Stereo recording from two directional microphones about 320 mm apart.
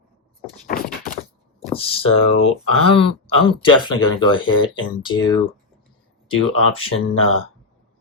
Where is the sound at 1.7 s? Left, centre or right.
Centre.